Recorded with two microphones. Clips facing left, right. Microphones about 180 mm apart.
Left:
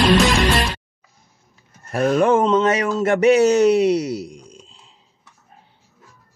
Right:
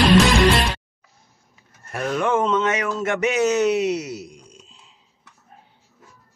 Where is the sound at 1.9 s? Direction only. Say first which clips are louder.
Left 6 dB; 40° left (ahead or behind).